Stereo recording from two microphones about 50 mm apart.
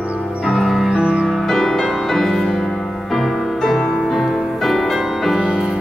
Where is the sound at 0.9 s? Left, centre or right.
Centre.